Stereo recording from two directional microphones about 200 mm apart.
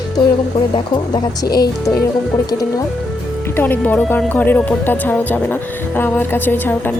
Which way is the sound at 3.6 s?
10° left (ahead or behind).